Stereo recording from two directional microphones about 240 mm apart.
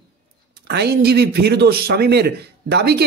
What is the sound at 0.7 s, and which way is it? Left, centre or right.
Speech, right.